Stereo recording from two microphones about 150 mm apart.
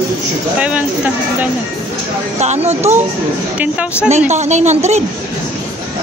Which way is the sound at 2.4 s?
45° right (ahead or behind).